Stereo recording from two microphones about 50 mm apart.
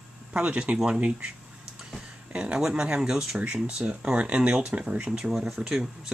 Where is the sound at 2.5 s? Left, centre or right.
Centre.